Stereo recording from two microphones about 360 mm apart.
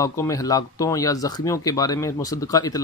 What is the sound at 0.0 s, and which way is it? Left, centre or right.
Speech, centre.